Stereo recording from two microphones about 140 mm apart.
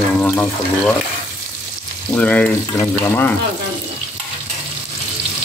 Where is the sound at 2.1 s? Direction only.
10° left (ahead or behind).